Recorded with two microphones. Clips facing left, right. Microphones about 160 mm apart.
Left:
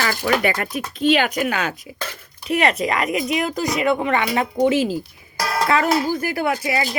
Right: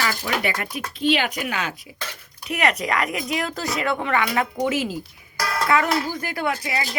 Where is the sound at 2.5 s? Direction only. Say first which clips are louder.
Left 4 dB; 30° left (ahead or behind).